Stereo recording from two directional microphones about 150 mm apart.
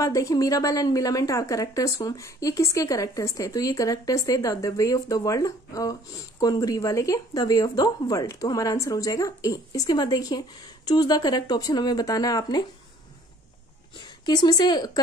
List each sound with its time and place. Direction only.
0.0 s a woman's voice: 20° left (ahead or behind)
13.9 s a woman's voice: 30° left (ahead or behind)